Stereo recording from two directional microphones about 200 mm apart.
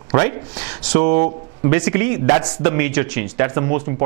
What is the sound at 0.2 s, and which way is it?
A man's voice, 10° right (ahead or behind).